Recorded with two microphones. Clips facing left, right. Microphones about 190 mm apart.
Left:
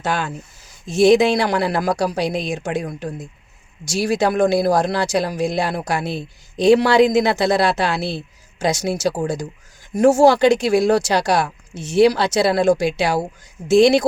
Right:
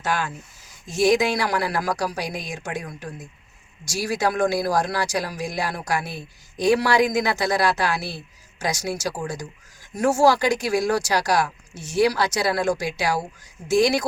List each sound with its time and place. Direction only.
0.0 s speech: 25° left (ahead or behind)